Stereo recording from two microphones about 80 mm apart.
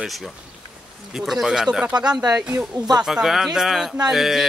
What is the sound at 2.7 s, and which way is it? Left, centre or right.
Speech, right.